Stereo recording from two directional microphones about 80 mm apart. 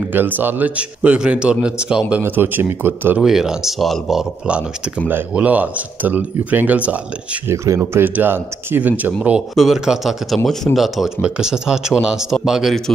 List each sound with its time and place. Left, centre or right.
0.1 s speech: right
2.2 s speech: right
3.2 s speech: centre
4.5 s speech: centre
7.4 s speech: right
7.9 s speech: right
9.6 s speech: centre
11.1 s speech: centre